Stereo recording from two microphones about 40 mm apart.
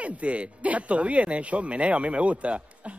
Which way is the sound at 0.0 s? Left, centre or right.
Right.